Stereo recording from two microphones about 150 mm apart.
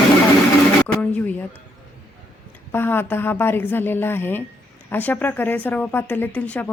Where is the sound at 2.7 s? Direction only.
15° left (ahead or behind).